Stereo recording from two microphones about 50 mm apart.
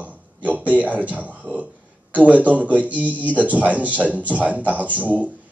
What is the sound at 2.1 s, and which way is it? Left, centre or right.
Speech, right.